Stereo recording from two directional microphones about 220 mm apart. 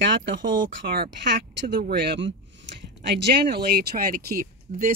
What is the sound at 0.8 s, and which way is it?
Speech, 45° right (ahead or behind).